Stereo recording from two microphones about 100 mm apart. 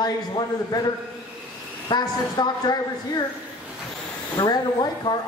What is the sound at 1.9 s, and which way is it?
A man's voice, 40° left (ahead or behind).